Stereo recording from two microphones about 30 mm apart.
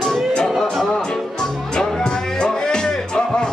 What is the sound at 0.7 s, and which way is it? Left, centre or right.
Music, centre.